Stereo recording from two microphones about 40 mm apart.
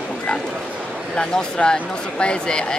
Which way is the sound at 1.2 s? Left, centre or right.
Left.